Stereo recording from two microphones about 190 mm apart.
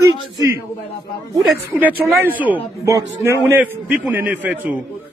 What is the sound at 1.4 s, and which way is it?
Speech, 10° right (ahead or behind).